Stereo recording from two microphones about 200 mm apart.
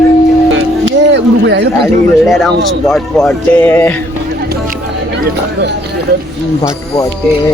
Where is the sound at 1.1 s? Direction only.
60° right (ahead or behind).